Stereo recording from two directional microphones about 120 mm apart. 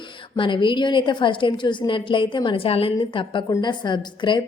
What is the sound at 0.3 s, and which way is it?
A woman's voice, 45° left (ahead or behind).